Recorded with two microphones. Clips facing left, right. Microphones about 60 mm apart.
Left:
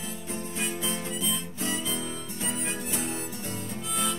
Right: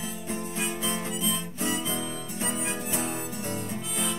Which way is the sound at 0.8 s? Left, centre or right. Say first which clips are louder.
Right 2 dB; right.